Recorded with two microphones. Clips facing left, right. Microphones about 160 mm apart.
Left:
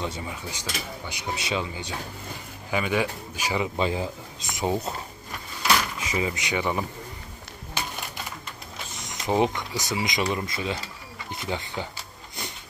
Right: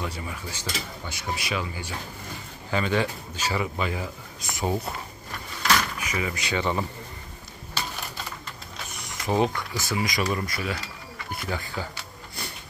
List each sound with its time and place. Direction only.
0.0 s speech: 20° left (ahead or behind)
5.9 s speech: 25° left (ahead or behind)
8.9 s speech: 20° left (ahead or behind)